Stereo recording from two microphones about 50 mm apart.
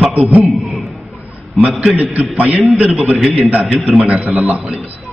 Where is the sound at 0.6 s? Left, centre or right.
Centre.